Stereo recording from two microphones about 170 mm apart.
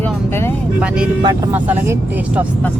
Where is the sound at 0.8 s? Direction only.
5° right (ahead or behind).